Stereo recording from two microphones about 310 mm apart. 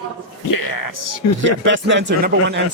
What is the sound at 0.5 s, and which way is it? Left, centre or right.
Speech, left.